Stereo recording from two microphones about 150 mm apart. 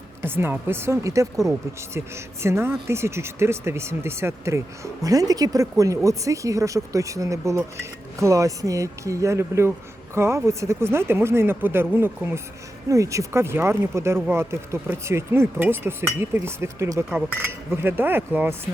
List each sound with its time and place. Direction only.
0.2 s speech: 15° right (ahead or behind)